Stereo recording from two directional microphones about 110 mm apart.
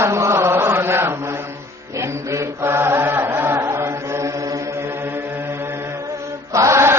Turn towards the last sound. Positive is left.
turn(degrees=-25)  # may be behind; listen again after turning